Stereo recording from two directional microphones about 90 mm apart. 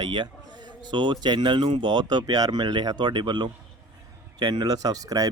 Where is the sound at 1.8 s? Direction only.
55° right (ahead or behind).